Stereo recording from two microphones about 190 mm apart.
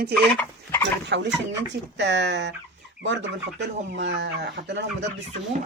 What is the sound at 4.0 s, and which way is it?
Speech, 70° right (ahead or behind).